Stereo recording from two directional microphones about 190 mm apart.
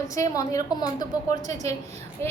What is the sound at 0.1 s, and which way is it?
Speech, 15° left (ahead or behind).